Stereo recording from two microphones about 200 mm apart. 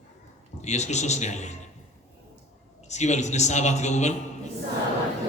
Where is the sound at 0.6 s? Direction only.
35° left (ahead or behind).